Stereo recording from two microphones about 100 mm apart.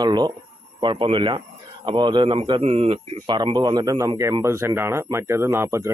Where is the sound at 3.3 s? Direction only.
50° right (ahead or behind); by 5.9 s 25° right (ahead or behind).